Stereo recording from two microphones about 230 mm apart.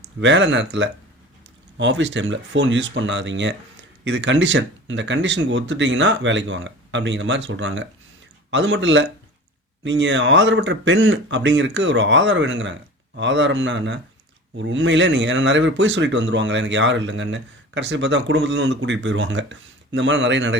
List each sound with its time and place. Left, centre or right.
0.0 s speech: right